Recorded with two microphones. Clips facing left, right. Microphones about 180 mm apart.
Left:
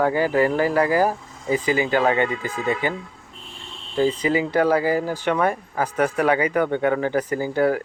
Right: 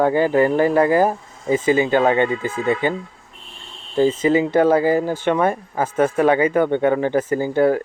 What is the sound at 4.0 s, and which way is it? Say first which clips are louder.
Speech: right 4 dB; 25° right (ahead or behind).